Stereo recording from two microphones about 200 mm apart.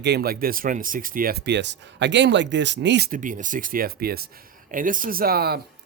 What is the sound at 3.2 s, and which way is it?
Speech, 40° right (ahead or behind).